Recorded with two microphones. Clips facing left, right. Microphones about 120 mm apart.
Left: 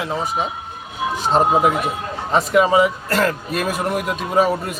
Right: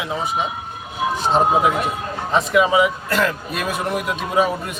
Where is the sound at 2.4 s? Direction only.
40° left (ahead or behind).